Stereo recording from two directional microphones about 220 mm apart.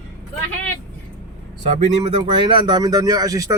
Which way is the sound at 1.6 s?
30° right (ahead or behind).